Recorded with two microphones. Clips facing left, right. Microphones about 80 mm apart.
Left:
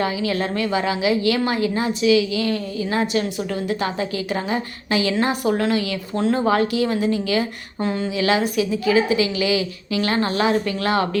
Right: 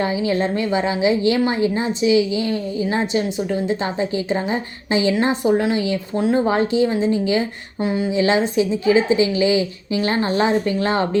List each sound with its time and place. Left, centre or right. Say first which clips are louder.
0.0 s a woman's voice: right 2 dB; right
6.1 s speech: right 1 dB; centre
6.5 s a woman's voice: right 1 dB; right